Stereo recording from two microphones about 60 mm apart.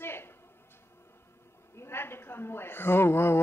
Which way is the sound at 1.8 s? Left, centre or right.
Left.